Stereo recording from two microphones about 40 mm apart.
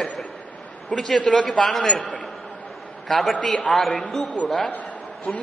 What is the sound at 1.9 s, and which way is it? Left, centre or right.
Speech, left.